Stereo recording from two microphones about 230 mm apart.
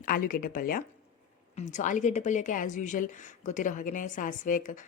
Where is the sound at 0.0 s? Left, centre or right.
Left.